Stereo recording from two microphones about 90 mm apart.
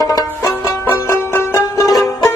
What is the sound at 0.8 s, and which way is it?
Music, 25° left (ahead or behind).